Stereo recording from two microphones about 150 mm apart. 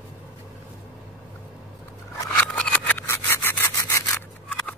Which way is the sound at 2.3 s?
10° left (ahead or behind).